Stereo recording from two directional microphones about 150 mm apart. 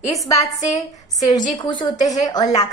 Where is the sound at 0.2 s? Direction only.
20° left (ahead or behind).